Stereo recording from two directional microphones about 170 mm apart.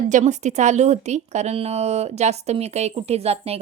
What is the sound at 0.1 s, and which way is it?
A woman's voice, 45° right (ahead or behind).